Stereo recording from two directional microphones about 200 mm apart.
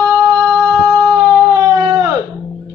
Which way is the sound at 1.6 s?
15° right (ahead or behind).